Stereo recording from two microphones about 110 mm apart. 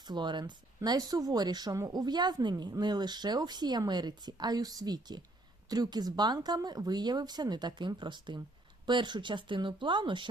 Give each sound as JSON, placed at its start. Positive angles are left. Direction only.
{"t": 0.0, "sound": "a woman's voice", "side_deg": -40}